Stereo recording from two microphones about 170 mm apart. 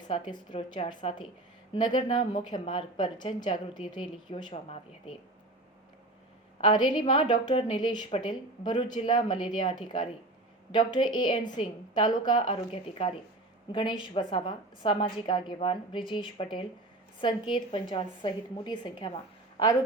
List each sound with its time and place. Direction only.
0.1 s a woman's voice: 25° left (ahead or behind)
6.6 s a woman's voice: 25° left (ahead or behind)